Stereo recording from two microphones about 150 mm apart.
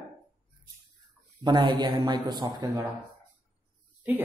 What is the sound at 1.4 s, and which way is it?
Speech, 30° right (ahead or behind).